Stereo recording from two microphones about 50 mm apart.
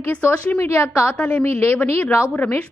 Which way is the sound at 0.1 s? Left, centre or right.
Left.